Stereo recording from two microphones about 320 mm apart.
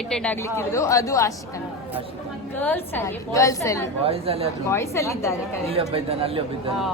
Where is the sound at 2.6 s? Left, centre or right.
Centre.